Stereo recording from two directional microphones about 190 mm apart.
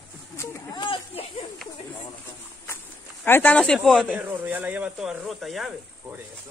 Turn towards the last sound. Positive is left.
turn(degrees=0)  # may be behind; listen again after turning